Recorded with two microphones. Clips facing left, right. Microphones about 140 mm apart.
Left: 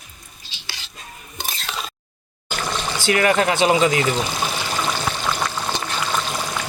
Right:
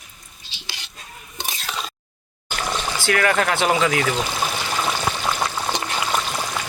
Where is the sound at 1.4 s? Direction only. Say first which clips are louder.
Even; 15° right (ahead or behind).